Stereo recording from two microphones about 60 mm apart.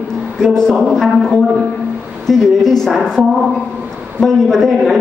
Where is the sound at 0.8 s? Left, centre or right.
Centre.